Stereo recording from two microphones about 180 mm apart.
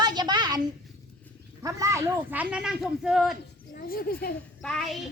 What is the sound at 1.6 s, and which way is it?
Speech, 15° right (ahead or behind).